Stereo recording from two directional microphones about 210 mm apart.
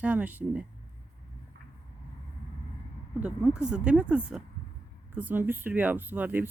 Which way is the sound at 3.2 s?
5° right (ahead or behind).